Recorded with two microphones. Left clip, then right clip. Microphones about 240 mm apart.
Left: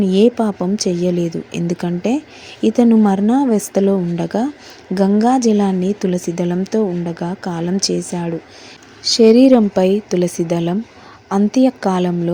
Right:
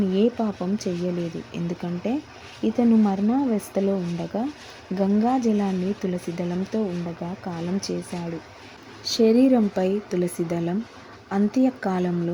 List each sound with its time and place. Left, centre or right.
0.1 s a woman's voice: centre
9.0 s a woman's voice: centre